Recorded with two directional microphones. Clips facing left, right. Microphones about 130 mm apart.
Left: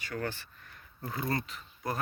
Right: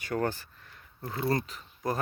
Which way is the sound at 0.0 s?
45° right (ahead or behind).